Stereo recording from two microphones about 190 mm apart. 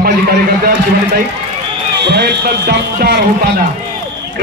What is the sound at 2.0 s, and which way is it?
A man's voice, 60° right (ahead or behind).